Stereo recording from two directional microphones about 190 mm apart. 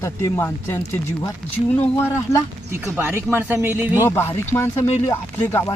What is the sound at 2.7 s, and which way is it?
Speech, 10° right (ahead or behind).